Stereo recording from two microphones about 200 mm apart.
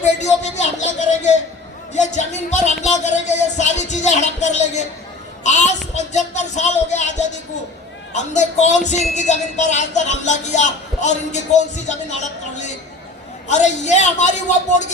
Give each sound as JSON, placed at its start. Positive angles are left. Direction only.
{"t": 0.0, "sound": "music", "side_deg": 35}
{"t": 5.4, "sound": "speech", "side_deg": 35}
{"t": 8.1, "sound": "music", "side_deg": 35}
{"t": 13.5, "sound": "music", "side_deg": 35}